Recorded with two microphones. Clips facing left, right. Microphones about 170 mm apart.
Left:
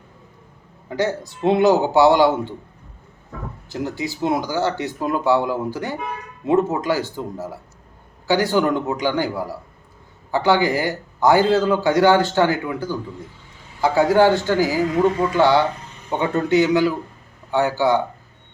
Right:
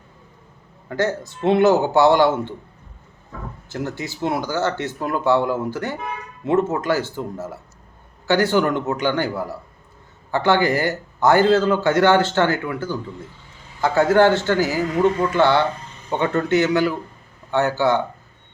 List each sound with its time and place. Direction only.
0.9 s a man's voice: 15° left (ahead or behind)
3.7 s a man's voice: 15° left (ahead or behind)